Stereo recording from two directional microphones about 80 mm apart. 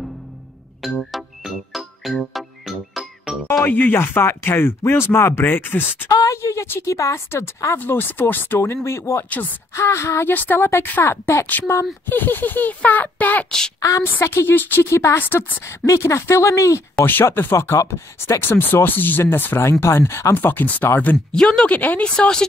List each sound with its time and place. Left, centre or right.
0.8 s music: centre
3.9 s speech: left
6.0 s a sound: left
6.3 s speech: left
10.3 s speech: left
13.7 s a woman's voice: left
15.6 s speech: left
17.0 s speech: left
20.3 s speech: left
21.3 s speech: centre
22.1 s speech: centre